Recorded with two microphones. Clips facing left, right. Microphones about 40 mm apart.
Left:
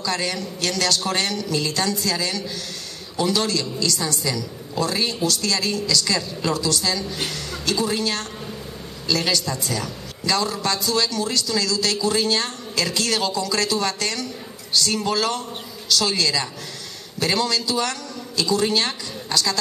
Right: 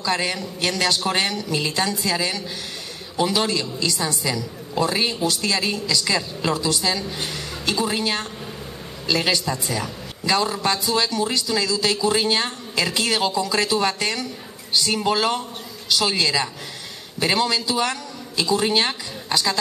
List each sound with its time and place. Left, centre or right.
0.0 s a woman's voice: centre